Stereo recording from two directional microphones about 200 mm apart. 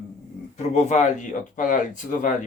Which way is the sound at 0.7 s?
35° left (ahead or behind).